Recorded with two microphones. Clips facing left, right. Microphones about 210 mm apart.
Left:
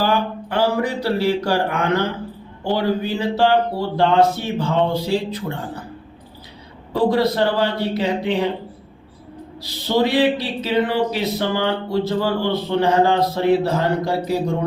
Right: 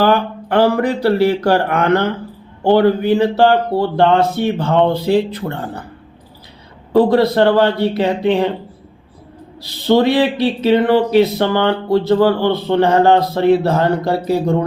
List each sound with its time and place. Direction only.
0.0 s speech: 60° right (ahead or behind)
6.9 s speech: 60° right (ahead or behind)
10.0 s speech: 60° right (ahead or behind)